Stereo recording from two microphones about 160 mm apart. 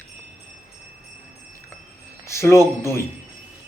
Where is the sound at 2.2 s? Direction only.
15° left (ahead or behind).